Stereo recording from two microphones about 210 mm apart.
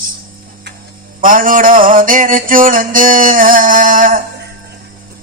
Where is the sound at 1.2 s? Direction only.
40° right (ahead or behind).